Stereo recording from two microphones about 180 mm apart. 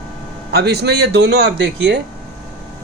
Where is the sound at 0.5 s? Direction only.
65° right (ahead or behind).